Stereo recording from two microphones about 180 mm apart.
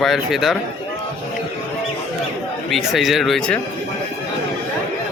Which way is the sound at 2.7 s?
Centre (ahead or behind).